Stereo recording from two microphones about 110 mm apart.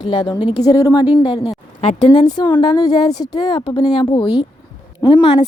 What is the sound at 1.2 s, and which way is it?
Speech, 45° left (ahead or behind).